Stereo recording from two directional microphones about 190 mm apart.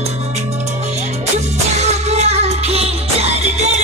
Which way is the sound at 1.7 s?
35° right (ahead or behind).